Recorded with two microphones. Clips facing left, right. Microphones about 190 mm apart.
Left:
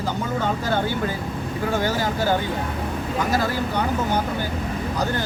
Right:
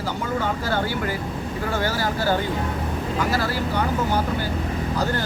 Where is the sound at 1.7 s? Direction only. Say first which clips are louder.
Left 1 dB; 15° left (ahead or behind).